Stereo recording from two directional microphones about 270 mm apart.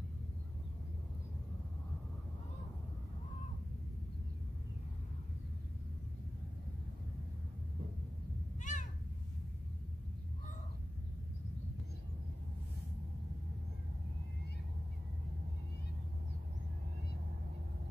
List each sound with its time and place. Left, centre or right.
8.5 s cat: left